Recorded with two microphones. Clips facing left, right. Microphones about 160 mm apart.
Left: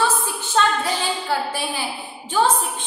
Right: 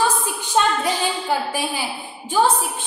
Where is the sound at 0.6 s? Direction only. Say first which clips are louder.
Right 1 dB; 15° right (ahead or behind).